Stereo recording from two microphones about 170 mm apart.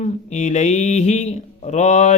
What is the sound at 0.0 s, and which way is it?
A man's voice, 45° left (ahead or behind).